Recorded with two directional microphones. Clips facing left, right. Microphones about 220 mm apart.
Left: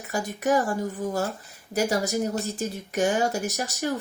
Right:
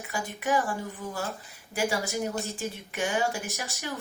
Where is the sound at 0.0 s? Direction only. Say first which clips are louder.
Left 5 dB; 40° left (ahead or behind).